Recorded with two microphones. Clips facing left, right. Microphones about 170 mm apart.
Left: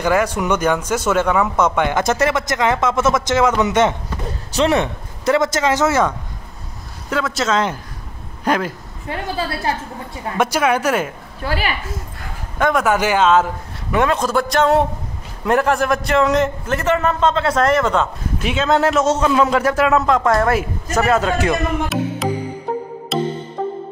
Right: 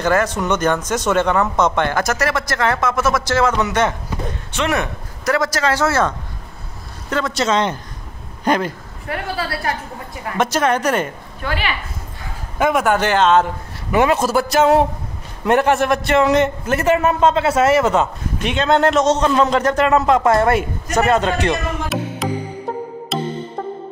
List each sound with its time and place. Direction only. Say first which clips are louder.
0.0 s speech: even; 10° left (ahead or behind)
2.0 s speech: left 2 dB; 25° left (ahead or behind)
4.5 s speech: left 5 dB; 30° left (ahead or behind); by 6.1 s 15° left (ahead or behind)
7.1 s a man's voice: right 1 dB; 5° left (ahead or behind)
9.0 s speech: left 1 dB; 20° left (ahead or behind)
10.3 s speech: even; 10° left (ahead or behind)
11.4 s a woman's voice: left 1 dB; 40° left (ahead or behind)
12.5 s a man's voice: even; 5° right (ahead or behind)
12.9 s speech: even; 10° left (ahead or behind)
13.9 s a man's voice: right 2 dB; 5° right (ahead or behind)
18.4 s a man's voice: right 1 dB; 5° left (ahead or behind)
23.1 s music: left 3 dB; centre (ahead or behind)